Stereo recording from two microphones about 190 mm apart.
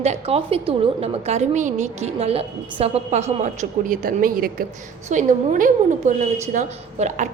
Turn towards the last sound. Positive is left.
turn(degrees=-40)  # may be behind; listen again after turning